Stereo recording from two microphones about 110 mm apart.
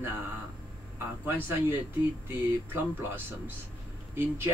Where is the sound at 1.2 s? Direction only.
20° right (ahead or behind).